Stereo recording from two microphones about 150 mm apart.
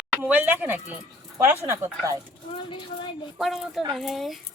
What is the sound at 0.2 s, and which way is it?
Speech, 10° right (ahead or behind).